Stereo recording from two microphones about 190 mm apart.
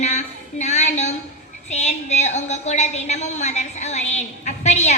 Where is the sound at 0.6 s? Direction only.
35° left (ahead or behind).